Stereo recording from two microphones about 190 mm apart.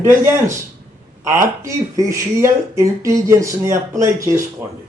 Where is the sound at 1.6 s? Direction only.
15° right (ahead or behind).